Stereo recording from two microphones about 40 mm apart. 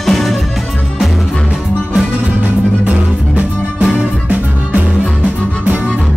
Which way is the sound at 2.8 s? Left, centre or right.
Right.